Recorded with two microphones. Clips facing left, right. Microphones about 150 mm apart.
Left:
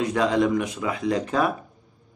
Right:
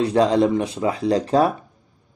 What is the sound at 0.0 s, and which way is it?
A man's voice, 35° right (ahead or behind).